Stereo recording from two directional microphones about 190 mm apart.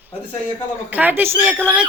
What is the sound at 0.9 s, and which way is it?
Speech, 10° right (ahead or behind).